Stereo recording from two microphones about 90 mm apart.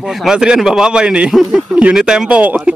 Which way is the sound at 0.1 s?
5° right (ahead or behind).